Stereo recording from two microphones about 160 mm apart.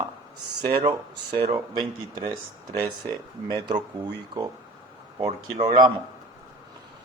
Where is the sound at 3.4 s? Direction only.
25° right (ahead or behind).